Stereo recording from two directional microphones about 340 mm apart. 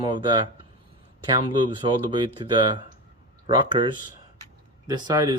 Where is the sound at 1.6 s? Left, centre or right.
Centre.